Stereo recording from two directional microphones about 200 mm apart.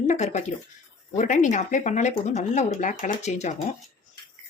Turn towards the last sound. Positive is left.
turn(degrees=35)  # may be behind; listen again after turning